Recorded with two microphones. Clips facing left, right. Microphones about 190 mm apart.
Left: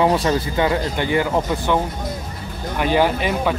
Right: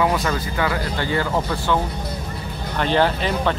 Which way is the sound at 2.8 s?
10° left (ahead or behind).